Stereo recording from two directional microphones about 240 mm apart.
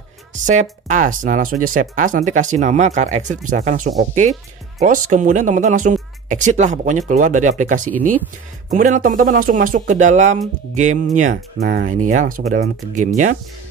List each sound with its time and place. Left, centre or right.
0.3 s speech: right